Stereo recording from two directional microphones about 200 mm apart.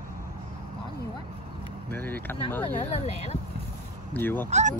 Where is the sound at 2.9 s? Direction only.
30° left (ahead or behind).